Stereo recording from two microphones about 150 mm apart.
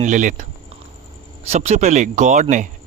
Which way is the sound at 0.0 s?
60° right (ahead or behind).